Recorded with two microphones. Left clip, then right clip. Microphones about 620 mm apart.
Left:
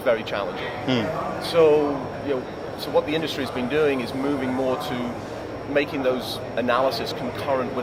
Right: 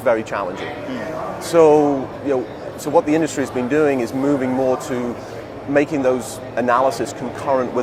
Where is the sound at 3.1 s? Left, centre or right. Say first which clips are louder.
Right 6 dB; right.